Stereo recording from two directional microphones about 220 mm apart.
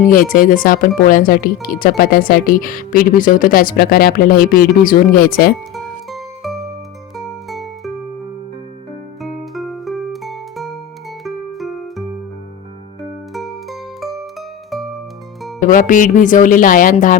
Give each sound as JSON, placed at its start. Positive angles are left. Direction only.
{"t": 0.1, "sound": "speech", "side_deg": 40}
{"t": 5.7, "sound": "music", "side_deg": 0}
{"t": 9.2, "sound": "music", "side_deg": 0}
{"t": 13.3, "sound": "music", "side_deg": 0}
{"t": 15.6, "sound": "speech", "side_deg": 35}